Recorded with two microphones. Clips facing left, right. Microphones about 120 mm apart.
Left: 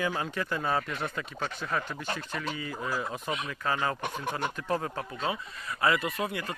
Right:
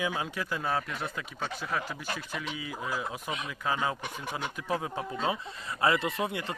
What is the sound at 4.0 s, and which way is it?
Speech, 55° left (ahead or behind).